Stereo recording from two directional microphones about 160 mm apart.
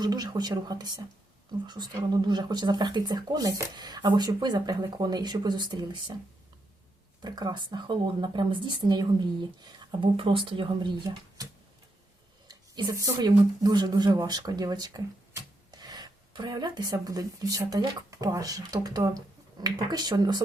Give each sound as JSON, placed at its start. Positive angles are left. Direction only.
{"t": 0.0, "sound": "speech", "side_deg": -25}
{"t": 7.2, "sound": "speech", "side_deg": -25}
{"t": 12.5, "sound": "speech", "side_deg": -25}